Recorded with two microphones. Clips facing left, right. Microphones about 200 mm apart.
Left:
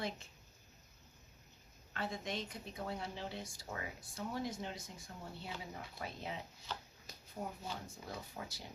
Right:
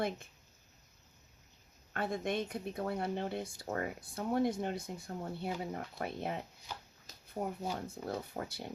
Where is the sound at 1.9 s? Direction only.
55° right (ahead or behind).